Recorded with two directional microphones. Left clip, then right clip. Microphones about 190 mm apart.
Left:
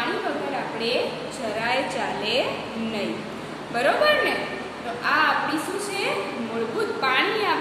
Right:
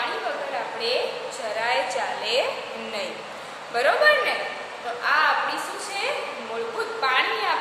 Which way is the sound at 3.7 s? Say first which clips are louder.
Right 1 dB; 15° right (ahead or behind).